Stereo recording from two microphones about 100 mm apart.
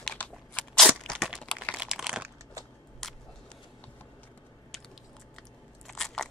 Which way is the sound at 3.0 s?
5° left (ahead or behind).